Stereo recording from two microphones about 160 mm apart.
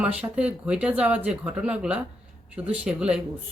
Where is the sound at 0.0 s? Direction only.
10° right (ahead or behind).